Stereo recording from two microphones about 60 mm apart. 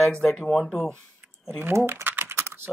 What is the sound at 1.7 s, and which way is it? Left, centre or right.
Speech, right.